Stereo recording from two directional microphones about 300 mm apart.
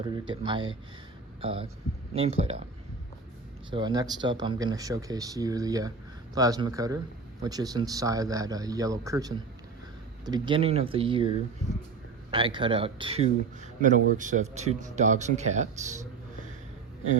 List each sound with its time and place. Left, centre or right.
0.0 s speech: centre
3.7 s speech: centre
12.3 s speech: centre